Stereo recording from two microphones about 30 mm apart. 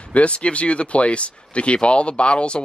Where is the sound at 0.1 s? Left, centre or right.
Left.